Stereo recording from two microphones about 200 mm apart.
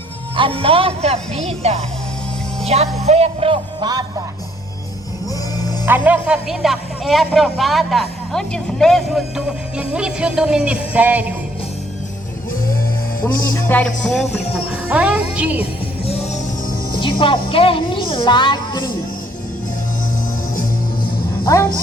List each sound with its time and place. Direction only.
0.3 s speech: 25° right (ahead or behind)
5.8 s speech: 10° right (ahead or behind)
13.2 s speech: 15° left (ahead or behind); by 15.6 s 5° right (ahead or behind)
16.0 s music: 30° left (ahead or behind)
17.0 s speech: 25° left (ahead or behind)
21.4 s a woman's voice: 15° left (ahead or behind)